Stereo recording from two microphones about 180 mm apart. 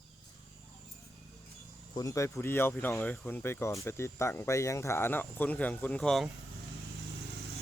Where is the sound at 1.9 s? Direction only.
20° left (ahead or behind); by 6.3 s centre (ahead or behind).